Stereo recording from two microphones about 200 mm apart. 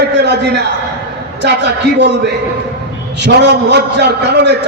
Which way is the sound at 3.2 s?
60° right (ahead or behind).